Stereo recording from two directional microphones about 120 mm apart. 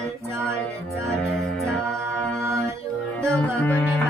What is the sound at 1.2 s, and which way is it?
Music, 5° left (ahead or behind).